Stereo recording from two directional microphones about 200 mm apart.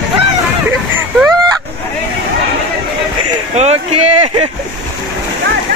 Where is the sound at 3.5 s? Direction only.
30° right (ahead or behind).